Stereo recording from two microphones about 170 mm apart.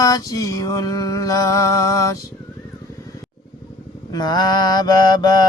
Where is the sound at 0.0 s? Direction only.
20° left (ahead or behind).